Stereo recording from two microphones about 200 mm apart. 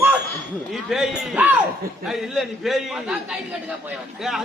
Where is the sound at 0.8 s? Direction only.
5° right (ahead or behind).